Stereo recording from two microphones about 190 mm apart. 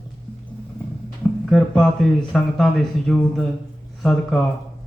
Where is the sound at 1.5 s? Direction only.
5° left (ahead or behind).